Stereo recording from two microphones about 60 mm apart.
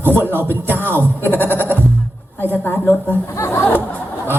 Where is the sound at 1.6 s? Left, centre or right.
Left.